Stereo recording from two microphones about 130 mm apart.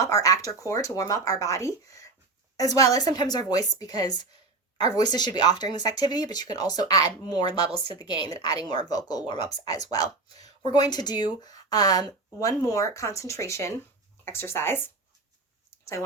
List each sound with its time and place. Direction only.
0.0 s speech: 25° left (ahead or behind)